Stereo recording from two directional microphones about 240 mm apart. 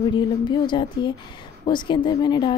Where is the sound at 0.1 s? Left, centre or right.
Centre.